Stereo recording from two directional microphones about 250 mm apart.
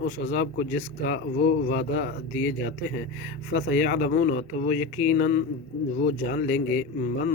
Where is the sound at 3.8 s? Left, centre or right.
Left.